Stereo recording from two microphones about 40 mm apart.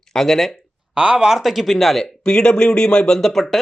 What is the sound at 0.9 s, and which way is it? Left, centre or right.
Speech, right.